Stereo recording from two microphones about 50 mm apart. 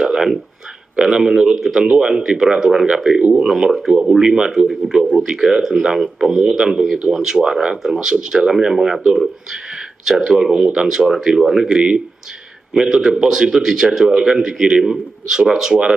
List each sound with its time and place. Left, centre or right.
0.0 s a sound: centre
1.1 s speech: centre
1.8 s speech: centre
3.2 s speech: right
3.4 s speech: centre
11.7 s speech: right; by 15.8 s centre